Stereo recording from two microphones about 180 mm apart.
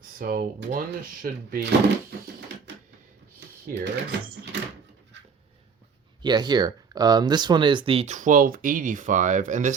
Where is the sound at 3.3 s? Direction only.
70° right (ahead or behind).